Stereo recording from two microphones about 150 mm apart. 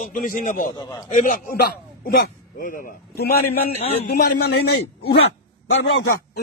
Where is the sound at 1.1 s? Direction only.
60° left (ahead or behind); by 4.5 s 90° left.